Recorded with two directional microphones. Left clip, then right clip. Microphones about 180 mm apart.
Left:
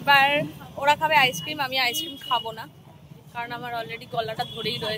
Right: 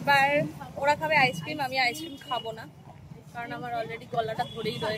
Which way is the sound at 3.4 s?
5° right (ahead or behind).